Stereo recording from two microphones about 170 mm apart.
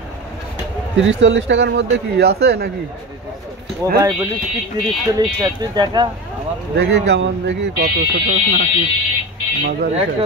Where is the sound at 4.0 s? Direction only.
15° right (ahead or behind).